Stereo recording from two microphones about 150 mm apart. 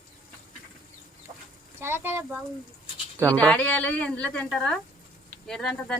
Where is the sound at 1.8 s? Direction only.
15° right (ahead or behind).